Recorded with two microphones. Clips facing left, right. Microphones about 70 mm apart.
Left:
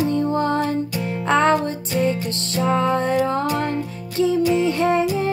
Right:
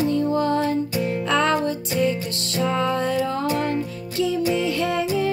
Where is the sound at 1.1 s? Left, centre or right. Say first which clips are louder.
Left 4 dB; left.